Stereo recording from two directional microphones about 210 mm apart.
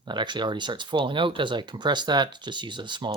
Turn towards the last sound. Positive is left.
turn(degrees=-20)  # may be behind; listen again after turning